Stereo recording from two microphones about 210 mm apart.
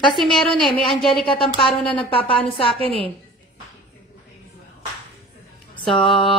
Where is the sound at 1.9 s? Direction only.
25° left (ahead or behind).